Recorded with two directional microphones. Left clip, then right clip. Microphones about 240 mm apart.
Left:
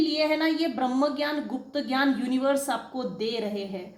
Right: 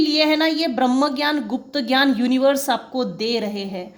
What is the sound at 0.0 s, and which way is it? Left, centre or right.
A woman's voice, right.